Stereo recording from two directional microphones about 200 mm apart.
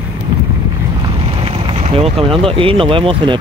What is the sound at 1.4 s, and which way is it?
Speech, 30° right (ahead or behind).